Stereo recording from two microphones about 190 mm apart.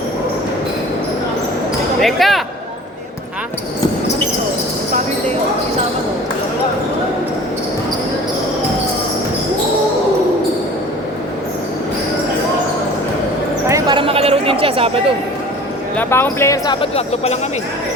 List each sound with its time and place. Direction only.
2.0 s speech: centre (ahead or behind)
13.7 s a sound: 20° right (ahead or behind)
16.0 s speech: 10° left (ahead or behind)
16.8 s speech: 35° left (ahead or behind)